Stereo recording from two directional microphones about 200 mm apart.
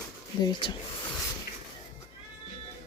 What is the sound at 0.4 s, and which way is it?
Speech, 20° left (ahead or behind).